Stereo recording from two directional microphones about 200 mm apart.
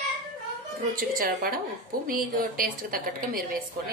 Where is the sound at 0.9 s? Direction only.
45° right (ahead or behind).